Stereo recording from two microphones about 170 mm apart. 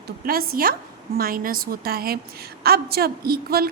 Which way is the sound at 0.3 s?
60° right (ahead or behind).